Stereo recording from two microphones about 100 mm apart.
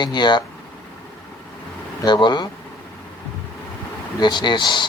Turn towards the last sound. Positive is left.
turn(degrees=50)  # may be behind; listen again after turning